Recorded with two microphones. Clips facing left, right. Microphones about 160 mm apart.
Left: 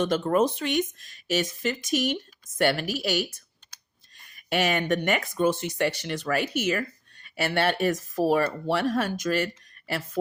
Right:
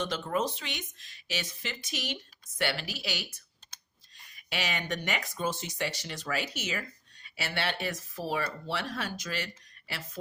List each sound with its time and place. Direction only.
0.0 s speech: 50° left (ahead or behind)